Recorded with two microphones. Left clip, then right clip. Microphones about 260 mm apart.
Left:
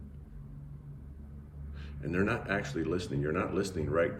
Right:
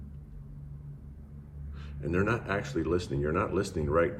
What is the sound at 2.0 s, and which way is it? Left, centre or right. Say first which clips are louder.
Speech: right 2 dB; centre.